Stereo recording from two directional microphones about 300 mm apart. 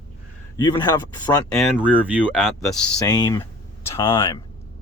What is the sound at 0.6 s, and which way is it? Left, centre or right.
Speech, centre.